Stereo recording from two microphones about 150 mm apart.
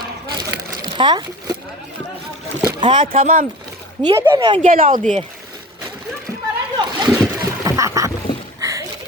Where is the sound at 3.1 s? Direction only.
70° right (ahead or behind).